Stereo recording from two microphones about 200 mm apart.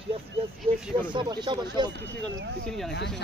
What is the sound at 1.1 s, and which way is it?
Speech, 25° right (ahead or behind).